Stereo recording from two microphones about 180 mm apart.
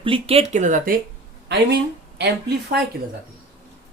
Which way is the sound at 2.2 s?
65° right (ahead or behind).